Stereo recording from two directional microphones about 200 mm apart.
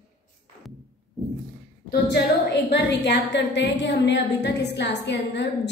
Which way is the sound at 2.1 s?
60° left (ahead or behind).